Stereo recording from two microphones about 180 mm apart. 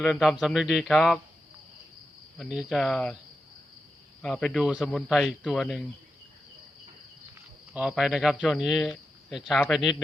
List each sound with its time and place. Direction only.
0.0 s speech: centre (ahead or behind)
2.4 s speech: 5° right (ahead or behind)
4.2 s speech: 5° left (ahead or behind)
7.7 s speech: 5° right (ahead or behind)